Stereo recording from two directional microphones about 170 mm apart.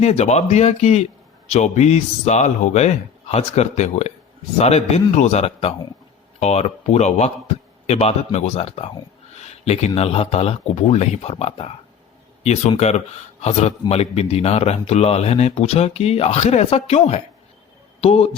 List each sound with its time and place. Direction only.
0.0 s a man's voice: 40° left (ahead or behind)